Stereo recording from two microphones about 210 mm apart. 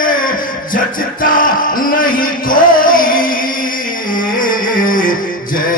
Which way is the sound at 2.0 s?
40° left (ahead or behind).